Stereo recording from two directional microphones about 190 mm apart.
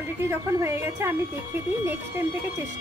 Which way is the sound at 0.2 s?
15° right (ahead or behind).